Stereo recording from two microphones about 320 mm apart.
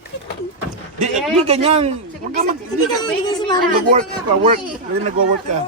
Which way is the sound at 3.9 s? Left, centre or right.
Right.